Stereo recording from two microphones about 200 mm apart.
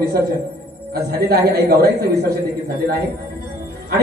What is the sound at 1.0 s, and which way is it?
A man's voice, 50° right (ahead or behind).